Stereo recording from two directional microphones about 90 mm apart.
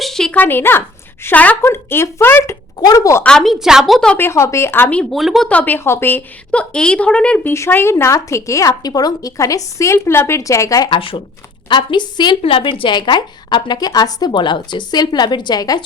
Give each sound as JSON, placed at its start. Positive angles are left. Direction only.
{"t": 0.0, "sound": "a sound", "side_deg": 5}
{"t": 0.3, "sound": "speech", "side_deg": 25}
{"t": 2.7, "sound": "a woman's voice", "side_deg": 45}
{"t": 3.2, "sound": "a woman's voice", "side_deg": 5}
{"t": 4.1, "sound": "speech", "side_deg": 25}
{"t": 5.1, "sound": "a woman's voice", "side_deg": 0}
{"t": 5.5, "sound": "a woman's voice", "side_deg": 20}
{"t": 7.4, "sound": "a woman's voice", "side_deg": 25}
{"t": 10.9, "sound": "speech", "side_deg": 75}
{"t": 11.7, "sound": "a woman's voice", "side_deg": 60}
{"t": 12.5, "sound": "a woman's voice", "side_deg": 85}